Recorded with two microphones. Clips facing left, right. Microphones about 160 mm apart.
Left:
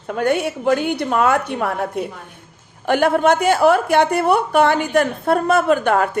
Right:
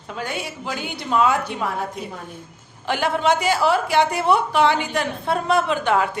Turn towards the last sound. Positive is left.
turn(degrees=50)  # may be behind; listen again after turning